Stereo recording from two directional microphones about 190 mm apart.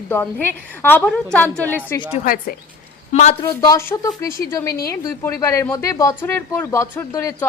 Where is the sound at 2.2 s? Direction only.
50° left (ahead or behind).